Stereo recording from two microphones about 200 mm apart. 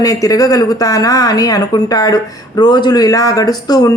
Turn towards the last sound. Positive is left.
turn(degrees=20)  # may be behind; listen again after turning